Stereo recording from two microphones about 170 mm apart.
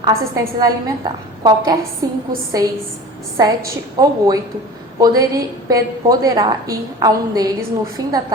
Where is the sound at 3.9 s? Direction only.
20° right (ahead or behind).